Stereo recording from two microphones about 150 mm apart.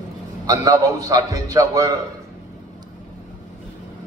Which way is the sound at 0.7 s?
25° right (ahead or behind).